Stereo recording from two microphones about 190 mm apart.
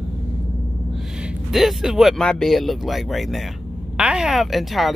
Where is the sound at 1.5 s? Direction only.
Centre (ahead or behind).